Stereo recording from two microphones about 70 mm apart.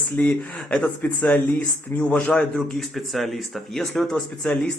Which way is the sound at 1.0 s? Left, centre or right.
Left.